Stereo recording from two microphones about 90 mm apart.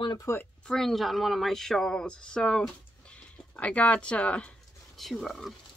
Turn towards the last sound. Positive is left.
turn(degrees=0)  # may be behind; listen again after turning